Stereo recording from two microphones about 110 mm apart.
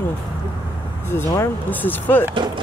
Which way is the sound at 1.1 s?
20° left (ahead or behind).